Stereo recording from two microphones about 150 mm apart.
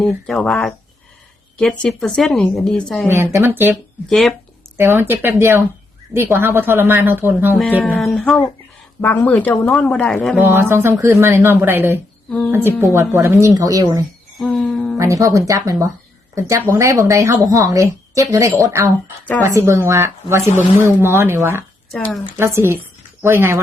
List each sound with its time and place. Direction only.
0.3 s speech: 5° left (ahead or behind)
3.1 s speech: 15° right (ahead or behind)
4.1 s speech: centre (ahead or behind)
4.8 s speech: 15° right (ahead or behind)
7.5 s speech: 10° left (ahead or behind)
10.3 s a woman's voice: 15° right (ahead or behind)
14.3 s a sound: 5° left (ahead or behind)
14.9 s a woman's voice: 20° right (ahead or behind)
21.9 s speech: 10° left (ahead or behind)
22.4 s speech: 15° right (ahead or behind)